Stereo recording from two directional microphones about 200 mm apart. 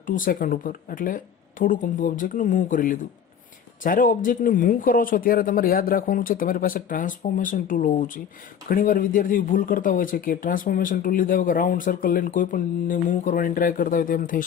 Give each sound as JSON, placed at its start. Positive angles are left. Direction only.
{"t": 0.0, "sound": "speech", "side_deg": 40}